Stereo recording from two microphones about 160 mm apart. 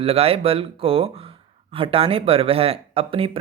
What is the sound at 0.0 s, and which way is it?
Speech, 35° right (ahead or behind).